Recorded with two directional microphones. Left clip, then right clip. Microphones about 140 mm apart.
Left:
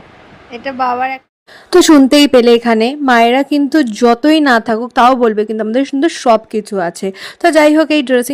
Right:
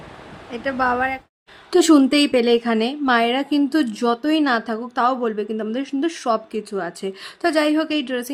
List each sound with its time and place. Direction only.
0.5 s a woman's voice: 5° left (ahead or behind)
1.7 s a woman's voice: 45° left (ahead or behind)